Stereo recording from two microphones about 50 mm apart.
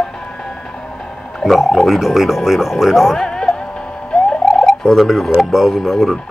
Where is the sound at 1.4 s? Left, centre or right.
Centre.